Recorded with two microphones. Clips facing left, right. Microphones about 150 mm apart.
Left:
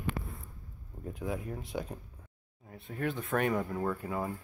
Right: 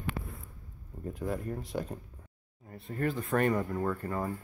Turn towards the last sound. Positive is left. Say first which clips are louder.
# right 1 dB
turn(degrees=5)  # may be behind; listen again after turning